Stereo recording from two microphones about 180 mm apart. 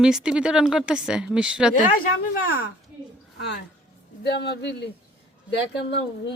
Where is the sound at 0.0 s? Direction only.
5° right (ahead or behind).